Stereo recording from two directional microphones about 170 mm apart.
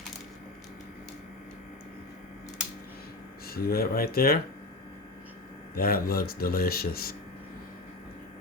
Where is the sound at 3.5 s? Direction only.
60° left (ahead or behind).